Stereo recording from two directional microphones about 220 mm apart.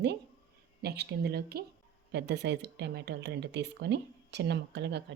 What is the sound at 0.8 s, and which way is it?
Speech, 45° right (ahead or behind).